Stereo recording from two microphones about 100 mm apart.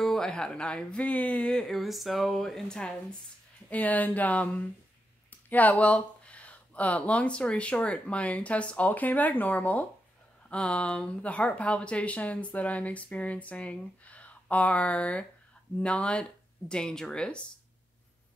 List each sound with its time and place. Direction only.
0.0 s speech: 5° left (ahead or behind)